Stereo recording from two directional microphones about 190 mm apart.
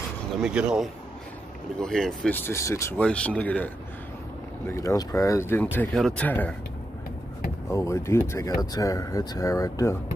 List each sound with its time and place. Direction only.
0.4 s speech: 5° right (ahead or behind)
7.7 s speech: 15° left (ahead or behind)